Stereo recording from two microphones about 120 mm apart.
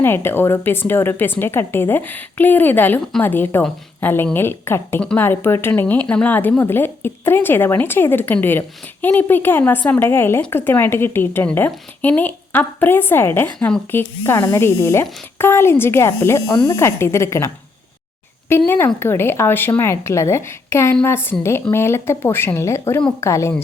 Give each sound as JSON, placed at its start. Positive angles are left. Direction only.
{"t": 0.0, "sound": "a woman's voice", "side_deg": 20}